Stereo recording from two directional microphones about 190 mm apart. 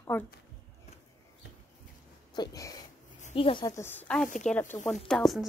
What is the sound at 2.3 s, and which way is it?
Speech, 20° left (ahead or behind).